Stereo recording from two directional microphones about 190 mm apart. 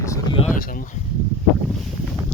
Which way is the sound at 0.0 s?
15° left (ahead or behind).